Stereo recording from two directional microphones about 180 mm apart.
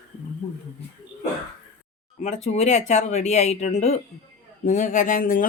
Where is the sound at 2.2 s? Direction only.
40° left (ahead or behind).